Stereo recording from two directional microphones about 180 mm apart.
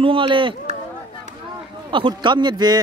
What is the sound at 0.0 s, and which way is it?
Speech, 30° right (ahead or behind).